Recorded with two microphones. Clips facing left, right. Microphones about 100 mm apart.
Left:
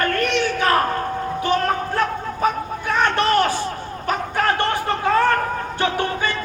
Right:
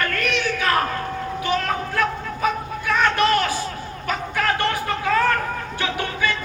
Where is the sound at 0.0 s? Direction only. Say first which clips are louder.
Left 3 dB; 35° left (ahead or behind).